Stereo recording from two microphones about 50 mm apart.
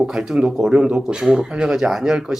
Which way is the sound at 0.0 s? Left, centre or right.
Centre.